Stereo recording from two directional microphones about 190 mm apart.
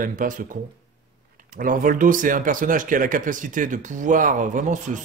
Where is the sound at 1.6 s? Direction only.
45° right (ahead or behind).